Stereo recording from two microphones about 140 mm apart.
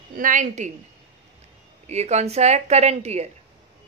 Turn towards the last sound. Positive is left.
turn(degrees=-50)  # may be behind; listen again after turning